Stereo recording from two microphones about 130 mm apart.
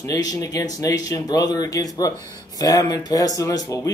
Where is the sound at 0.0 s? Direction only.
30° left (ahead or behind).